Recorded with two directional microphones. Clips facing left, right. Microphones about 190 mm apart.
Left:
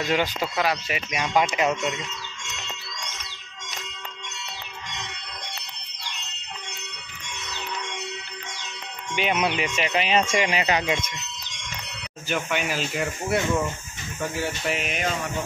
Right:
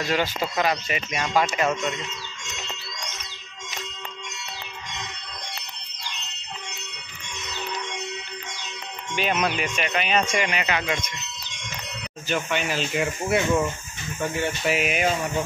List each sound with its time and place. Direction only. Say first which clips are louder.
0.1 s speech: even; 15° left (ahead or behind)
9.1 s speech: even; 15° left (ahead or behind); by 10.9 s 30° left (ahead or behind)
12.3 s speech: right 1 dB; 10° left (ahead or behind)
12.9 s speech: right 3 dB; centre (ahead or behind)